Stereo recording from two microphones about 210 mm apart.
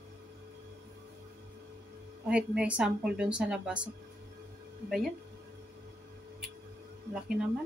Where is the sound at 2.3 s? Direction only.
5° right (ahead or behind).